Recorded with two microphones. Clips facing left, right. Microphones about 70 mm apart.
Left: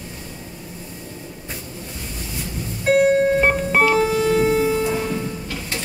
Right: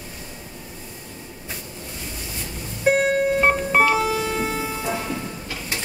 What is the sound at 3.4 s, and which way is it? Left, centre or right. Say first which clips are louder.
Music: left 1 dB; centre.